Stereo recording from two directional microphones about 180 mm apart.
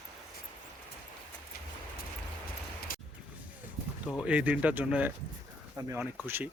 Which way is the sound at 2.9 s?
50° left (ahead or behind).